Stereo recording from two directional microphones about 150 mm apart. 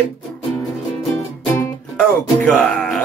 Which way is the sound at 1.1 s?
20° left (ahead or behind).